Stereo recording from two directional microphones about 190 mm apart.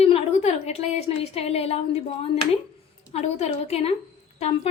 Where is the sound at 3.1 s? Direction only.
35° left (ahead or behind).